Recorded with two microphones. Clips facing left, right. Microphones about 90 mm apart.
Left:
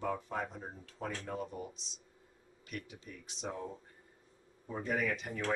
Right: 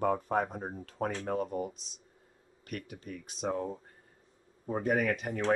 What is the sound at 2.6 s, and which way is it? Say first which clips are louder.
Speech: right 5 dB; 50° right (ahead or behind).